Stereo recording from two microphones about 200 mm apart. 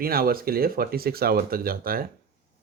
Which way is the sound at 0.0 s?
50° right (ahead or behind).